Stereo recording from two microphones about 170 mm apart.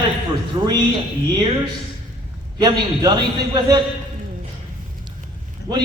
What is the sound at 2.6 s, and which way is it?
A man's voice, 25° right (ahead or behind).